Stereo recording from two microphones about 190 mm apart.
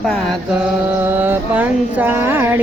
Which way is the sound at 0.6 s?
10° right (ahead or behind).